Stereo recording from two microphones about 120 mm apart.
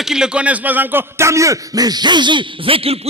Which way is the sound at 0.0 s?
5° right (ahead or behind).